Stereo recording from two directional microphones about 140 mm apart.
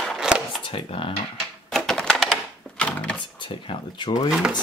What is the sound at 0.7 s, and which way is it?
Speech, 40° left (ahead or behind).